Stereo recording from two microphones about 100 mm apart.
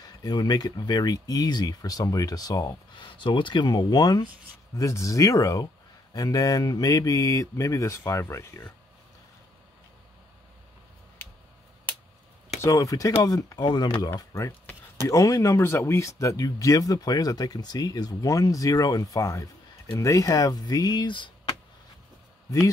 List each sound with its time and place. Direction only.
0.0 s speech: 45° left (ahead or behind)
3.0 s speech: 55° left (ahead or behind); by 8.6 s 30° left (ahead or behind)
12.6 s speech: 35° left (ahead or behind); by 21.3 s 50° left (ahead or behind)